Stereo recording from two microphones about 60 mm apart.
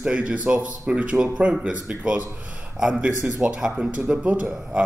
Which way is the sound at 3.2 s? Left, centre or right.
Right.